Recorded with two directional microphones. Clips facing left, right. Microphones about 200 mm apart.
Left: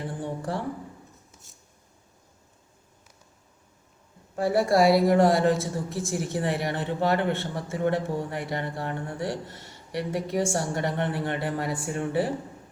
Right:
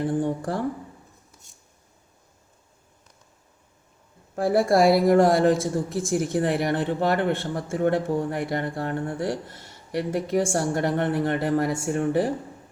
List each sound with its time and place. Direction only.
0.2 s speech: 50° right (ahead or behind)
4.4 s speech: 50° right (ahead or behind)